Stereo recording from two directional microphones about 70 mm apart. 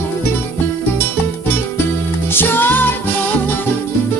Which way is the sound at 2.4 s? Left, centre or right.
Left.